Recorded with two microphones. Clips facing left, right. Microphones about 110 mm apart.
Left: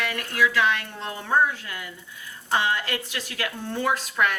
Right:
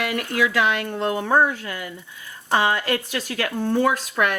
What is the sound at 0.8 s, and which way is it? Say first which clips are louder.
Speech: right 10 dB; 90° right.